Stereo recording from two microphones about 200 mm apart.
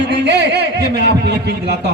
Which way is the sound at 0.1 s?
55° right (ahead or behind).